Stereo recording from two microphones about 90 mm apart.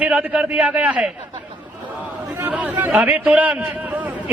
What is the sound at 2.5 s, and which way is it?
A man's voice, 15° right (ahead or behind).